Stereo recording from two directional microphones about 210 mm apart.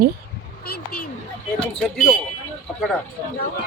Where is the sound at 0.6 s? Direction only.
45° left (ahead or behind).